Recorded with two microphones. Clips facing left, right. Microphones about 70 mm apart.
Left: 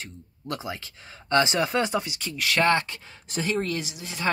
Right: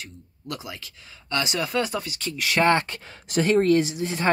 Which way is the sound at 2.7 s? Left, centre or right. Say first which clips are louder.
Right 2 dB; right.